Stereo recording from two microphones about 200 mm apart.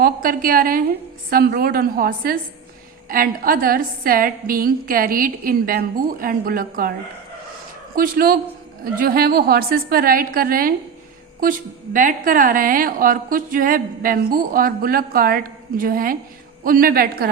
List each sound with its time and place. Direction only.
0.0 s a woman's voice: 45° right (ahead or behind)
7.9 s a woman's voice: 45° right (ahead or behind)